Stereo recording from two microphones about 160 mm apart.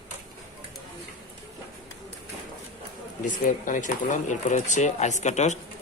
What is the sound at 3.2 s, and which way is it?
Speech, 55° left (ahead or behind).